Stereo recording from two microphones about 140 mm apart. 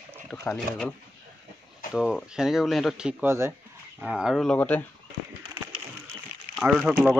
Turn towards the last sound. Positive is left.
turn(degrees=-5)  # may be behind; listen again after turning